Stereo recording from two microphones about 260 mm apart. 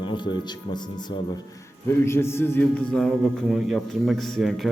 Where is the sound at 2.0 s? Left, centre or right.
Centre.